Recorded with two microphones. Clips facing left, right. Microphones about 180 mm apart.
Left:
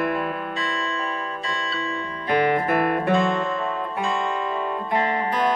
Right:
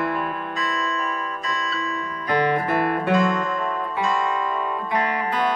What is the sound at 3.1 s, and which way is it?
Music, 30° left (ahead or behind).